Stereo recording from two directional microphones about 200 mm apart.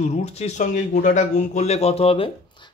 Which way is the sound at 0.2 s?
35° left (ahead or behind).